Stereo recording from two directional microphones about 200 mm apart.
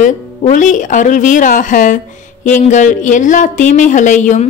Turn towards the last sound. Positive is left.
turn(degrees=40)  # may be behind; listen again after turning